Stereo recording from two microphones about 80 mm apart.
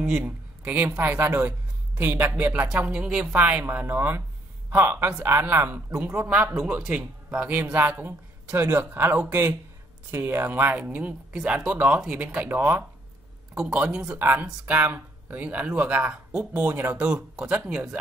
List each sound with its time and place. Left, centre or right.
0.2 s a woman's voice: right
3.3 s speech: centre
11.3 s a woman's voice: centre
11.7 s speech: right
13.7 s a woman's voice: centre